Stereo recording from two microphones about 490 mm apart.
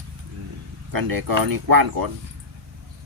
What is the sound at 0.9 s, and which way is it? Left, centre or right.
Speech, right.